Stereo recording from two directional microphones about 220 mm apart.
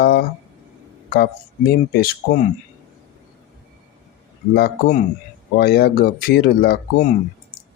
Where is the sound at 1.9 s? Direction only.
40° left (ahead or behind).